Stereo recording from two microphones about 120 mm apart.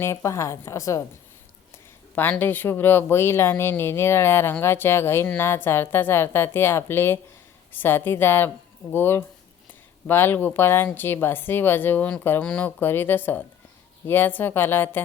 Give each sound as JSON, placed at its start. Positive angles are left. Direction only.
{"t": 0.0, "sound": "speech", "side_deg": 25}
{"t": 2.4, "sound": "speech", "side_deg": 15}